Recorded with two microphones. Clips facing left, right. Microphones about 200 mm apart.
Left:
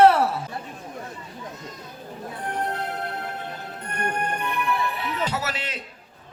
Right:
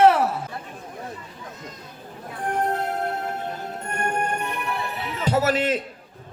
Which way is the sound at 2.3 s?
50° right (ahead or behind).